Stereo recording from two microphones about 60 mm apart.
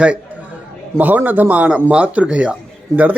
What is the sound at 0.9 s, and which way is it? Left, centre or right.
A man's voice, right.